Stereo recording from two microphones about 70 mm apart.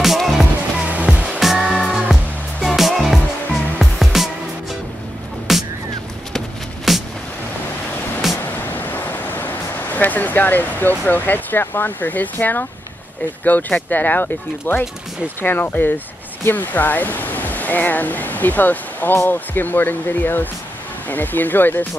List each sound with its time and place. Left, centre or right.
0.0 s music: centre
0.8 s music: centre
5.5 s music: centre
6.9 s music: centre
8.4 s ocean: left
13.4 s speech: left